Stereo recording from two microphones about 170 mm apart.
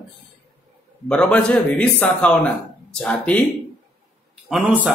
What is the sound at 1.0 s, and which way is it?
A man's voice, 5° left (ahead or behind).